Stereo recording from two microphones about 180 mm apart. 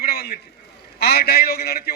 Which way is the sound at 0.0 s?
60° left (ahead or behind).